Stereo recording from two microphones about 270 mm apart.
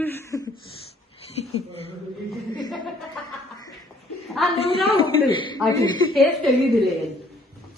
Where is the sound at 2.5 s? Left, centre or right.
Centre.